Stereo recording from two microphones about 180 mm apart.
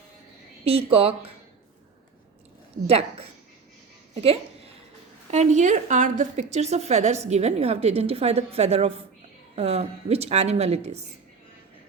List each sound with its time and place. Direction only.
0.6 s a woman's voice: 35° right (ahead or behind)
2.8 s a woman's voice: 35° right (ahead or behind)